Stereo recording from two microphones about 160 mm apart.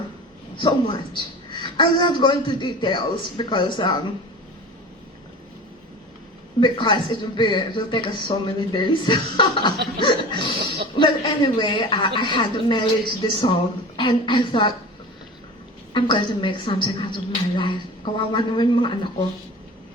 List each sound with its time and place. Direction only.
0.6 s a woman's voice: 30° left (ahead or behind)
6.6 s a woman's voice: 30° left (ahead or behind)
15.9 s a woman's voice: 30° left (ahead or behind)